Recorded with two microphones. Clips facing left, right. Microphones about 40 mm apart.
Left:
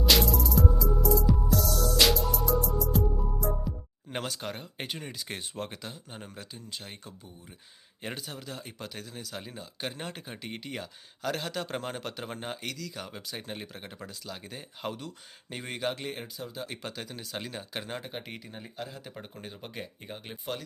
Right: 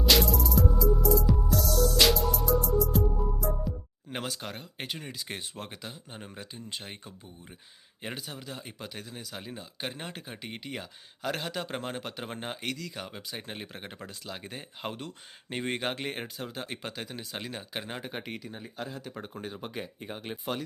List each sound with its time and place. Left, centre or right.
0.0 s music: centre
4.1 s speech: centre
8.0 s speech: centre
12.6 s speech: right
12.9 s speech: centre; by 16.6 s right
16.6 s speech: centre
18.3 s speech: centre